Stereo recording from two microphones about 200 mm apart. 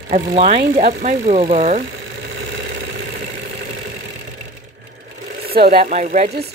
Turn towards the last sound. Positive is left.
turn(degrees=-35)  # may be behind; listen again after turning